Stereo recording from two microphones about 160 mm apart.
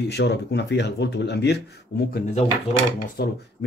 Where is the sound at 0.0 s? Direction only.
90° left.